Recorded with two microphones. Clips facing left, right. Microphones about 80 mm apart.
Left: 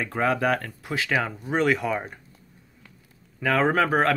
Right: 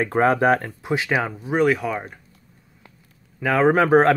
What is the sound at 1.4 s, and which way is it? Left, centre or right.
Speech, centre.